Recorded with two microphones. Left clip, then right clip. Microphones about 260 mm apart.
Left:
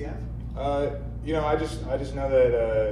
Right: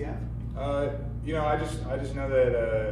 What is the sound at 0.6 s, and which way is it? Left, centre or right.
A man's voice, left.